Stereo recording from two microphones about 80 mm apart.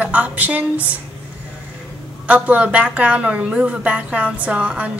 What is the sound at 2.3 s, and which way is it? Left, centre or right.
A woman's voice, centre.